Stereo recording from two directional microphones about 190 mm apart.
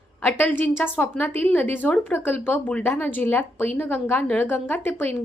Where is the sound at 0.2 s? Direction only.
10° left (ahead or behind).